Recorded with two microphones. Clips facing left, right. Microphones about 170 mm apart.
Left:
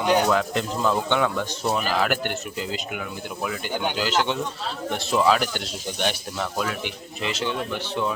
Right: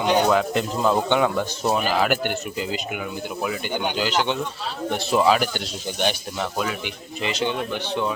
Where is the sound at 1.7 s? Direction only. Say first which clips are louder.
Right 2 dB; centre (ahead or behind).